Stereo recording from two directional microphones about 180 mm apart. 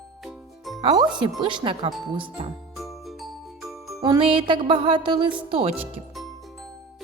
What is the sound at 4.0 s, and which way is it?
Speech, 25° right (ahead or behind).